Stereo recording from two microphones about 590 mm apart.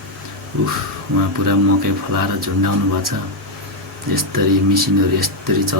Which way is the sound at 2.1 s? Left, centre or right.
Right.